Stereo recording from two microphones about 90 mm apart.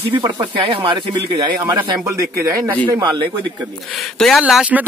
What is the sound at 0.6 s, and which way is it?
Speech, 65° right (ahead or behind).